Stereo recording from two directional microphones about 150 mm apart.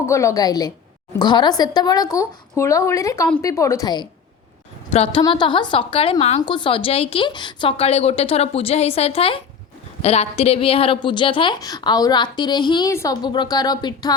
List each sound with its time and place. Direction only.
0.0 s speech: 20° left (ahead or behind)
4.9 s a woman's voice: 40° left (ahead or behind)
5.2 s a woman's voice: 30° left (ahead or behind); by 6.4 s 45° left (ahead or behind)
6.4 s a woman's voice: 30° left (ahead or behind)